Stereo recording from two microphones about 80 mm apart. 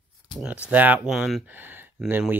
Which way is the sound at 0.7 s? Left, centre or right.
Centre.